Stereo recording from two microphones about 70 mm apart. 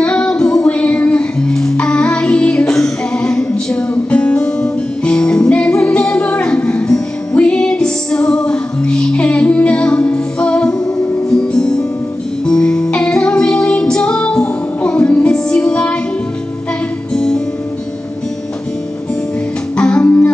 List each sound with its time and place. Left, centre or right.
0.0 s music: centre
17.1 s music: centre
19.8 s music: centre